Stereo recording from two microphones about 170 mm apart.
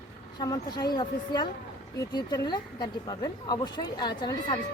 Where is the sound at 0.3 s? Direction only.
25° left (ahead or behind).